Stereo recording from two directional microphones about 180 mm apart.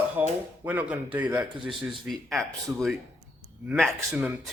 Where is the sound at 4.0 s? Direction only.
10° right (ahead or behind).